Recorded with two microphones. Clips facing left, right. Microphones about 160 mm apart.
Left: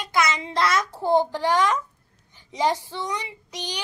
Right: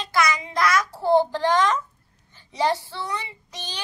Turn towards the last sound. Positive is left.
turn(degrees=15)  # may be behind; listen again after turning